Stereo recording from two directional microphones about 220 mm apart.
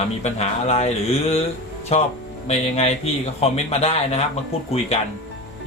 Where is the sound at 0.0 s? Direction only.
30° left (ahead or behind).